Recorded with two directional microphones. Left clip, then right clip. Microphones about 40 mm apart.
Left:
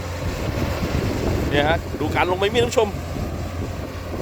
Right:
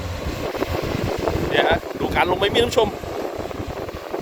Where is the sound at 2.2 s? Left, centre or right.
Right.